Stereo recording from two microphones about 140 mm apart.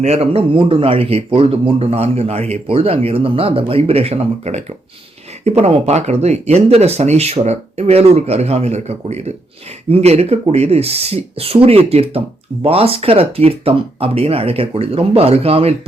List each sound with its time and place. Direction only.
0.0 s speech: 50° right (ahead or behind)